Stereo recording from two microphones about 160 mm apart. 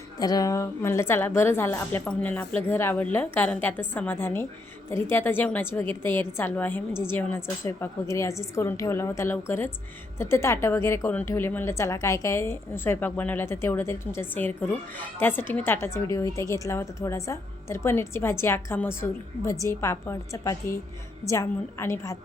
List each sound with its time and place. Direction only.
0.2 s a woman's voice: 25° left (ahead or behind)